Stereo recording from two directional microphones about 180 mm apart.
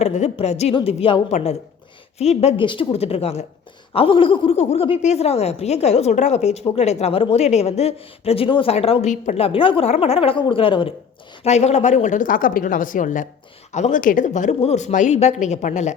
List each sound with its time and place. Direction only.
0.0 s a woman's voice: 40° left (ahead or behind)